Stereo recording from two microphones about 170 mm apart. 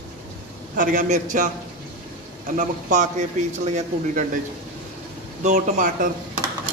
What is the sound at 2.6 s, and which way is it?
Speech, 45° right (ahead or behind).